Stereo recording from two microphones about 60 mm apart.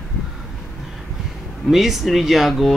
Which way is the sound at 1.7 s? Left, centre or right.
Centre.